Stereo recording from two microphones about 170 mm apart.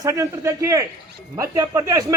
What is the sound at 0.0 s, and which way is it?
A man's voice, 20° right (ahead or behind).